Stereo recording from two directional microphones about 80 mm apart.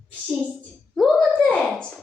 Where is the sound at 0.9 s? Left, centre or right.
Centre.